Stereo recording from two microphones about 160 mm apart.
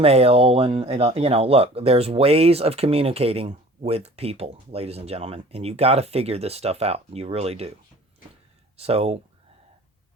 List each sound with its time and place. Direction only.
0.0 s speech: 40° right (ahead or behind)
8.8 s speech: 40° right (ahead or behind)